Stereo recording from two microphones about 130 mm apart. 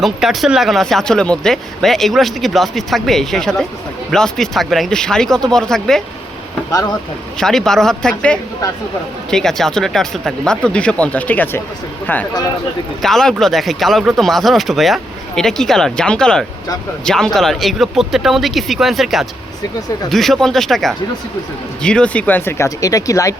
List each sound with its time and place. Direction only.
0.0 s speech: 5° right (ahead or behind)
6.7 s speech: 30° left (ahead or behind)
7.3 s speech: 5° left (ahead or behind)
13.0 s speech: 5° left (ahead or behind); by 23.3 s 25° left (ahead or behind)